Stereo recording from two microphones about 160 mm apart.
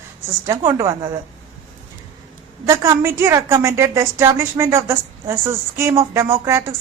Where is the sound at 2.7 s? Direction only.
20° right (ahead or behind).